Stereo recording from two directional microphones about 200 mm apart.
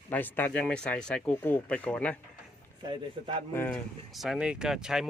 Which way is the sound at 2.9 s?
25° right (ahead or behind).